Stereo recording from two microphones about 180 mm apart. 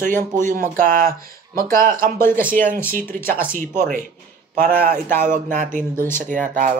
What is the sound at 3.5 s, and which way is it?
Speech, 50° right (ahead or behind).